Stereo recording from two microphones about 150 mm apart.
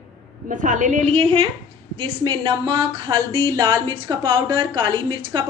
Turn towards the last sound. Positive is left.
turn(degrees=-30)  # may be behind; listen again after turning